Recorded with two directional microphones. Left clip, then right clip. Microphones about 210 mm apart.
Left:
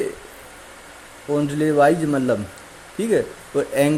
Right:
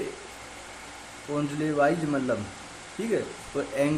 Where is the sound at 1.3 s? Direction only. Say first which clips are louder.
Left 9 dB; 35° left (ahead or behind).